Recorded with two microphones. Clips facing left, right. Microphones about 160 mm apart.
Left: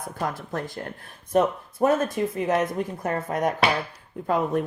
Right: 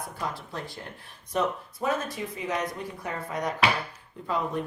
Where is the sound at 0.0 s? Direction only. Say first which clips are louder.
Left 4 dB; 50° left (ahead or behind).